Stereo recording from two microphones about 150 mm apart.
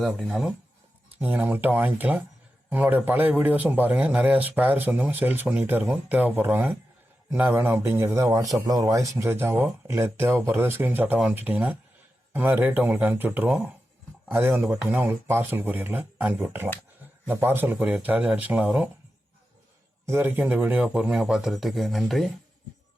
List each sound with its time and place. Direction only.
0.0 s a man's voice: centre (ahead or behind)
20.1 s a man's voice: 15° right (ahead or behind); by 22.3 s centre (ahead or behind)